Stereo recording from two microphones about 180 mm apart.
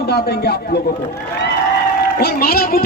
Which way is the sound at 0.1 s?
60° left (ahead or behind).